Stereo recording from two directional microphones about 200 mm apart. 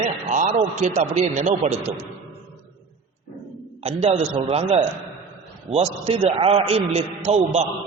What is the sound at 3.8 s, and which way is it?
A man's voice, 30° right (ahead or behind).